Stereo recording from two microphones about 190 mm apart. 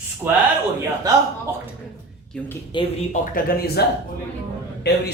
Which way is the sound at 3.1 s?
45° left (ahead or behind).